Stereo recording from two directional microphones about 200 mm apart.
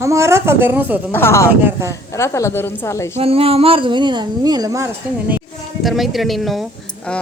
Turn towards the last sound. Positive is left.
turn(degrees=0)  # may be behind; listen again after turning